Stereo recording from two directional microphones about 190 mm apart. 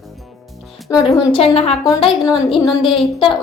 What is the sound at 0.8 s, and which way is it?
A woman's voice, 20° left (ahead or behind).